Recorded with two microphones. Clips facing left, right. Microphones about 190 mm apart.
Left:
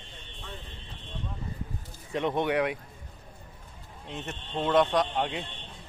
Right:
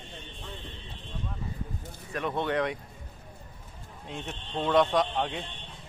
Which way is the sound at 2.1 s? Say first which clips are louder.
Left 3 dB; 20° left (ahead or behind).